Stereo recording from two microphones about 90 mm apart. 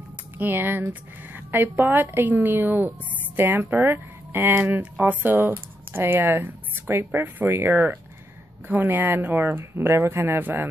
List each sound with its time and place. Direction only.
0.4 s speech: 25° right (ahead or behind)